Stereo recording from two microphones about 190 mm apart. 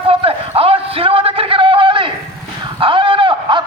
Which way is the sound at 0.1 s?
30° right (ahead or behind).